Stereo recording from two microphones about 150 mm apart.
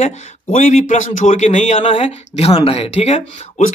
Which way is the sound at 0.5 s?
60° left (ahead or behind).